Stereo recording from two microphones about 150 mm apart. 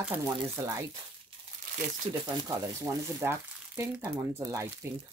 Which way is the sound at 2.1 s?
25° right (ahead or behind).